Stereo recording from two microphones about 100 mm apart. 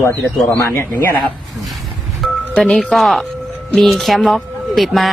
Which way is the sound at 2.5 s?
5° left (ahead or behind).